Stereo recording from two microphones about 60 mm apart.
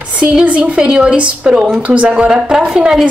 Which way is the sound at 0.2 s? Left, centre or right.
Right.